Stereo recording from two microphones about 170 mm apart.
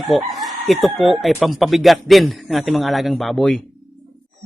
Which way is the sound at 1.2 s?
Centre (ahead or behind).